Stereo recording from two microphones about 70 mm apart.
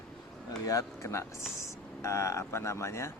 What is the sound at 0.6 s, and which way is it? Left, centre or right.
Speech, left.